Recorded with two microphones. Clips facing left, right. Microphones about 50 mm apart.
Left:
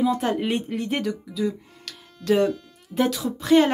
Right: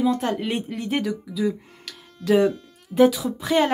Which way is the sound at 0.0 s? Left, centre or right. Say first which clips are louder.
Even; centre.